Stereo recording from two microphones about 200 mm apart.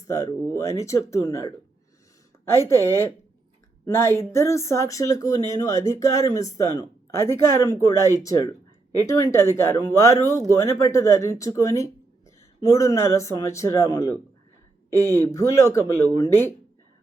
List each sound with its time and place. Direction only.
0.1 s speech: 15° left (ahead or behind)
15.3 s speech: 15° left (ahead or behind)